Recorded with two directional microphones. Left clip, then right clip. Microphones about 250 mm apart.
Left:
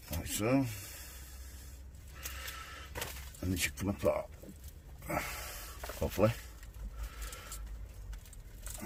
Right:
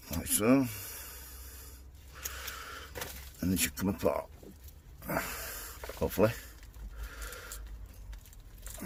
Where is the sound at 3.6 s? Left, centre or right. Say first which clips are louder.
Right 1 dB; right.